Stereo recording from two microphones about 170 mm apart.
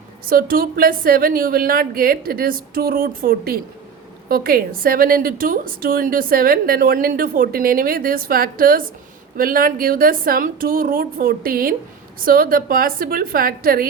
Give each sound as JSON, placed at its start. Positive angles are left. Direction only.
{"t": 0.3, "sound": "a woman's voice", "side_deg": -60}